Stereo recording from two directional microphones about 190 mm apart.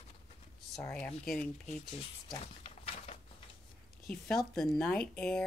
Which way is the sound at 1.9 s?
30° left (ahead or behind).